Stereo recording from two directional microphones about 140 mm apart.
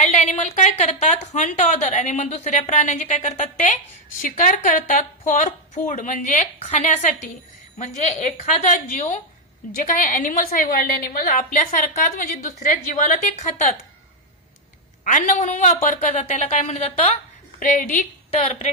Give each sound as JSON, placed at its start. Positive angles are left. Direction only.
{"t": 0.0, "sound": "a woman's voice", "side_deg": 55}
{"t": 15.0, "sound": "a man's voice", "side_deg": 65}
{"t": 17.6, "sound": "a woman's voice", "side_deg": 70}
{"t": 18.4, "sound": "a man's voice", "side_deg": 50}